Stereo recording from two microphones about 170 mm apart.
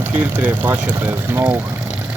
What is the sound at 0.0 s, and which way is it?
Speech, 10° right (ahead or behind).